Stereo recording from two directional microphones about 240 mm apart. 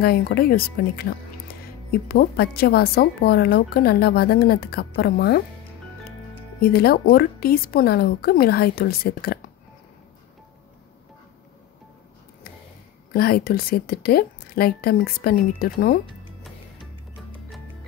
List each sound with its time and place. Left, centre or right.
0.0 s speech: left
6.7 s speech: left
13.1 s speech: left